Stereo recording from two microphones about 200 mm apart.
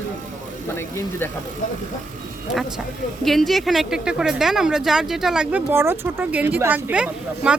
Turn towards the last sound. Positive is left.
turn(degrees=-5)  # may be behind; listen again after turning